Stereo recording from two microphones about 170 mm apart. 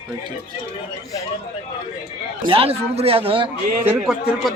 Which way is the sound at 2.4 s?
35° right (ahead or behind).